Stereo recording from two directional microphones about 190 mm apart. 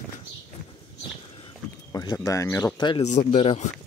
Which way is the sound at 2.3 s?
15° left (ahead or behind).